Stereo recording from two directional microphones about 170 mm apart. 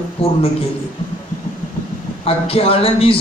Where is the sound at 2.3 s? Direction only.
35° left (ahead or behind).